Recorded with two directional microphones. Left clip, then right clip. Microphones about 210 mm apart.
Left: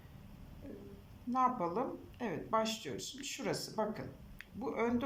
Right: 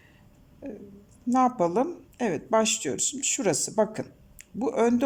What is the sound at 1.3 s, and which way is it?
Speech, 55° right (ahead or behind).